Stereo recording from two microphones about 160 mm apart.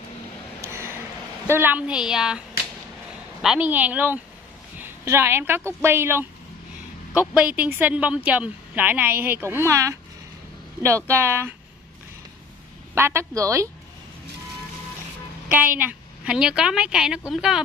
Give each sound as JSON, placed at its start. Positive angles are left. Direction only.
{"t": 0.6, "sound": "a sound", "side_deg": -15}
{"t": 1.5, "sound": "a woman's voice", "side_deg": -10}
{"t": 3.4, "sound": "a woman's voice", "side_deg": -10}
{"t": 11.1, "sound": "speech", "side_deg": -15}
{"t": 12.9, "sound": "speech", "side_deg": -15}
{"t": 15.5, "sound": "a woman's voice", "side_deg": -10}